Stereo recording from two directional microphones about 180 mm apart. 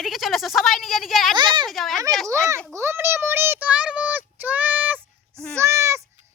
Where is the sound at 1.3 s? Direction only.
25° right (ahead or behind).